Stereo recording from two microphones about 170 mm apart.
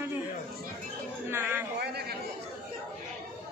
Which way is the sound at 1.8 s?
75° right (ahead or behind).